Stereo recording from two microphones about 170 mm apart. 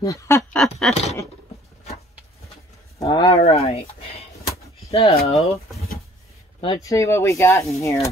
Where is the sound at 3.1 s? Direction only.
30° left (ahead or behind).